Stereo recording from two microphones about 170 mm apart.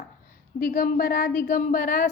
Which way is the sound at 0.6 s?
55° left (ahead or behind).